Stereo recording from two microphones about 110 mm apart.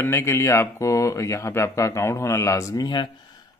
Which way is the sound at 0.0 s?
25° left (ahead or behind).